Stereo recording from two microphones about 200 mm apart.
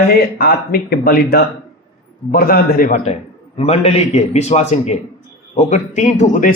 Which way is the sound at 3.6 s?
30° left (ahead or behind).